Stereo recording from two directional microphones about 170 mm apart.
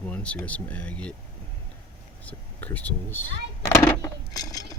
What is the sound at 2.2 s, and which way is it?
Speech, 10° left (ahead or behind).